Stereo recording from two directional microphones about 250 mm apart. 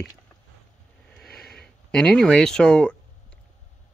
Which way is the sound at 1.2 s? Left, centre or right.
Left.